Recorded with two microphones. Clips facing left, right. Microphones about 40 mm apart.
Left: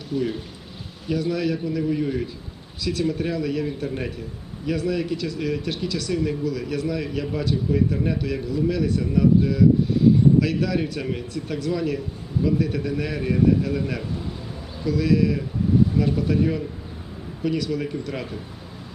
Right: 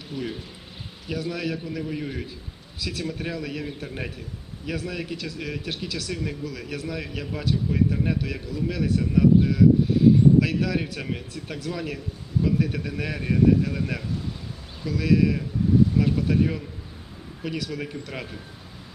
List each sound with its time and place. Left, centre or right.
0.1 s speech: right
1.1 s a man's voice: centre